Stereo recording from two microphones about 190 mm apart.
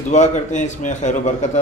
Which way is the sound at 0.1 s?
40° left (ahead or behind).